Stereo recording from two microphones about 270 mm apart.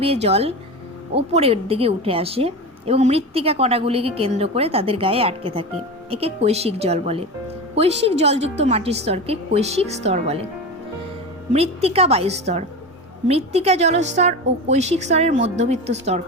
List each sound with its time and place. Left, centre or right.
0.0 s a woman's voice: right
11.5 s a woman's voice: right